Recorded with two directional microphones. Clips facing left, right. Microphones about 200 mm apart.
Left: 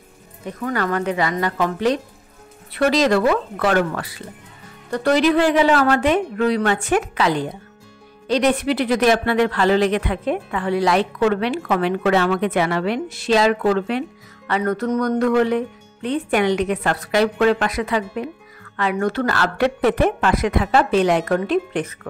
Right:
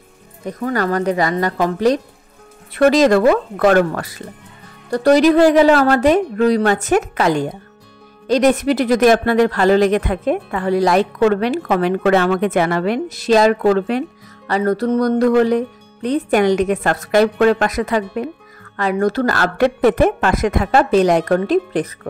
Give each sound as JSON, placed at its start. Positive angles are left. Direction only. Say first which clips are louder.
{"t": 0.5, "sound": "speech", "louder": "right 3 dB", "side_deg": -40}